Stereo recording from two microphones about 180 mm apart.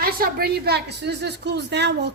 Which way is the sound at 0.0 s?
55° right (ahead or behind).